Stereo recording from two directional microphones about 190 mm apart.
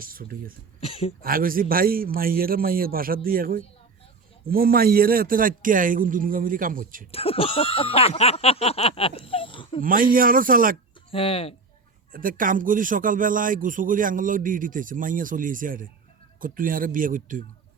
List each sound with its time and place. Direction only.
0.0 s a man's voice: 50° right (ahead or behind)
0.8 s throat clearing: 30° left (ahead or behind)
1.2 s a man's voice: 50° right (ahead or behind)
7.1 s speech: 30° left (ahead or behind)
9.8 s a man's voice: 45° right (ahead or behind)
11.1 s speech: 30° left (ahead or behind)
12.1 s a man's voice: 45° right (ahead or behind)